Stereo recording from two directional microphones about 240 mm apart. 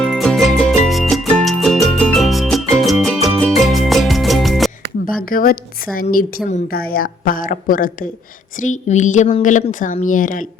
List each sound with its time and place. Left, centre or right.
0.0 s music: centre
5.3 s a woman's voice: left